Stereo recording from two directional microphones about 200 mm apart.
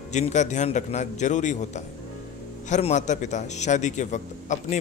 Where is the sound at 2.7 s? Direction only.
35° left (ahead or behind).